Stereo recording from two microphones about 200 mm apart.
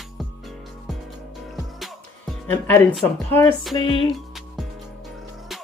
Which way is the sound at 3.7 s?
25° left (ahead or behind).